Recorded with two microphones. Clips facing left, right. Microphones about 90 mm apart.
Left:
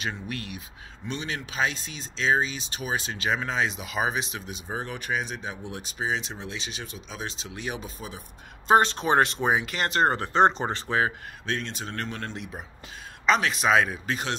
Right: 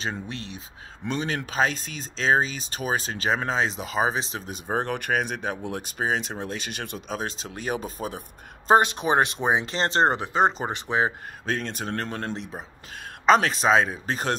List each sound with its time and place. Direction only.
0.0 s speech: 30° right (ahead or behind)
1.0 s speech: 45° right (ahead or behind)
7.2 s speech: 45° right (ahead or behind)
8.7 s speech: 15° right (ahead or behind)
10.1 s speech: 10° right (ahead or behind)
10.9 s speech: 20° right (ahead or behind)
11.4 s speech: 45° right (ahead or behind)